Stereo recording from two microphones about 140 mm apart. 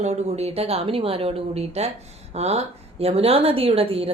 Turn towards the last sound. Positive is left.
turn(degrees=-45)  # may be behind; listen again after turning